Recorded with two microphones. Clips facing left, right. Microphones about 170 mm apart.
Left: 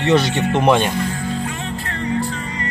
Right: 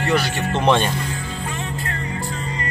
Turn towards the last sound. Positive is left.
turn(degrees=10)  # may be behind; listen again after turning